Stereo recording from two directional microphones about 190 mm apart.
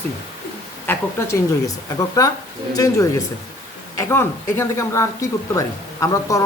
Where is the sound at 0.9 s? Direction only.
15° left (ahead or behind).